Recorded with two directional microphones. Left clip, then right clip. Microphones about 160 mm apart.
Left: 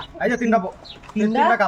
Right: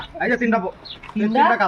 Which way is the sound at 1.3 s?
35° left (ahead or behind).